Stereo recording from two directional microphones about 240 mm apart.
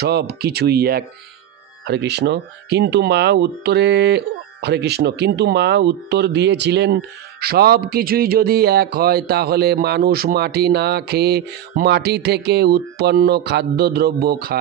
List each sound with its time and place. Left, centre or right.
0.0 s speech: right